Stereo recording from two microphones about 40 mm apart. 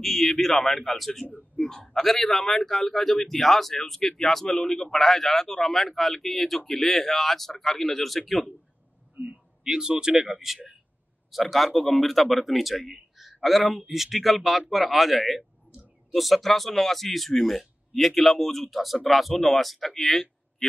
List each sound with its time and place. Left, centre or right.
0.0 s a man's voice: centre
9.3 s speech: right
11.5 s speech: centre